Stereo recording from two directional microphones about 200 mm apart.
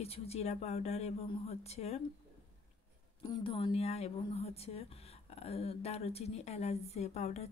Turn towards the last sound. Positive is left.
turn(degrees=30)  # may be behind; listen again after turning